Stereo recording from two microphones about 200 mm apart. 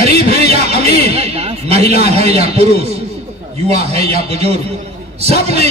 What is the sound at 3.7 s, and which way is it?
Speech, 30° right (ahead or behind).